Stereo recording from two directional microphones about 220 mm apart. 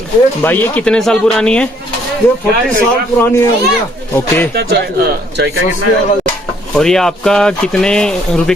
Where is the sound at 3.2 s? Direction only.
10° left (ahead or behind).